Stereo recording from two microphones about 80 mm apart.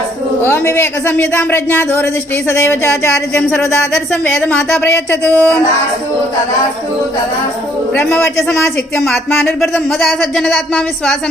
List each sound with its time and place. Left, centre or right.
0.4 s speech: left
4.9 s speech: centre
7.9 s speech: left
9.0 s speech: centre